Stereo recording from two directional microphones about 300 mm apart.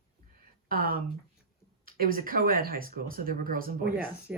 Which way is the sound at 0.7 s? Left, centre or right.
Right.